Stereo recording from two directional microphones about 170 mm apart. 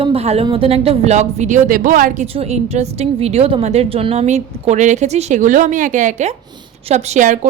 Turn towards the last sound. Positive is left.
turn(degrees=-50)  # may be behind; listen again after turning